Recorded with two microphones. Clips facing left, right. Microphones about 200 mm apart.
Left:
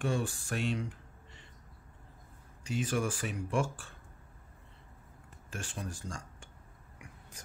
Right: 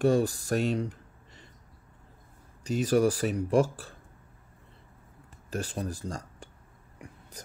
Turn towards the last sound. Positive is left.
turn(degrees=-35)  # may be behind; listen again after turning